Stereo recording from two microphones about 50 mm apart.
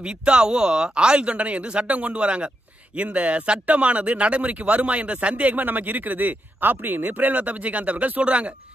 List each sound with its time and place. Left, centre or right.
0.0 s speech: centre